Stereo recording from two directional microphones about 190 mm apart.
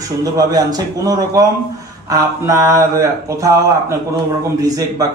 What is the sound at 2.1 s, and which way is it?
Mantra, 15° right (ahead or behind).